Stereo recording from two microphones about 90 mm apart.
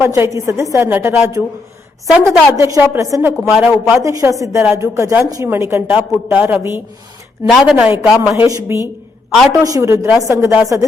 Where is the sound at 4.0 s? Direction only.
35° right (ahead or behind).